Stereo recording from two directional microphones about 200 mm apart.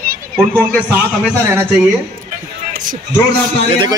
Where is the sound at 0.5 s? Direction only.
10° right (ahead or behind).